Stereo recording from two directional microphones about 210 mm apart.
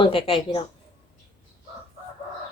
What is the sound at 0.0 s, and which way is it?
Speech, 25° left (ahead or behind).